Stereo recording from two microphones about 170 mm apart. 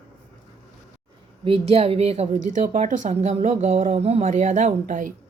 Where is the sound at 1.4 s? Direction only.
35° right (ahead or behind).